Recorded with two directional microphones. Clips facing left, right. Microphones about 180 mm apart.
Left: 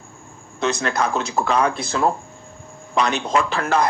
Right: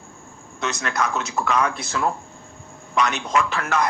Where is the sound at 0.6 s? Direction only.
30° left (ahead or behind).